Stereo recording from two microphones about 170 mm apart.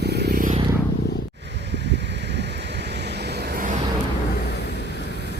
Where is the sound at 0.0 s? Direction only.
75° right (ahead or behind).